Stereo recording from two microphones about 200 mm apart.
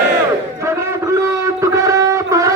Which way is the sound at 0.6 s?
15° right (ahead or behind).